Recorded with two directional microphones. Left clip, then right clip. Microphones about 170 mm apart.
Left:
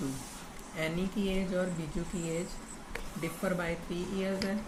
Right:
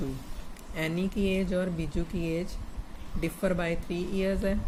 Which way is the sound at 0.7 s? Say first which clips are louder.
Right 3 dB; 75° right (ahead or behind).